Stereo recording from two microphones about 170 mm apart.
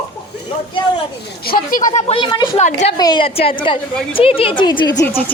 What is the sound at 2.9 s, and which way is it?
Speech, 25° left (ahead or behind).